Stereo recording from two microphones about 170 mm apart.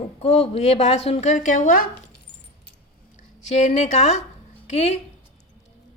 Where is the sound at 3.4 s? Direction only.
40° left (ahead or behind).